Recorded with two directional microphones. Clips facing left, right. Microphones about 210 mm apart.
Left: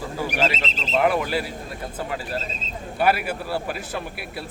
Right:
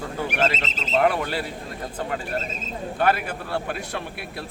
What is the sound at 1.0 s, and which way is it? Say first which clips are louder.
Speech: left 1 dB; 5° left (ahead or behind).